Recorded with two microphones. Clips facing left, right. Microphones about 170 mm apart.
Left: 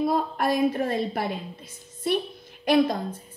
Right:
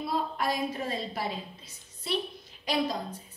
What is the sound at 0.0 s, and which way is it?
A woman's voice, 50° left (ahead or behind).